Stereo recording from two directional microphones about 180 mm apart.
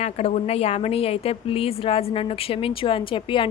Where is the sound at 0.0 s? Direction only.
35° left (ahead or behind).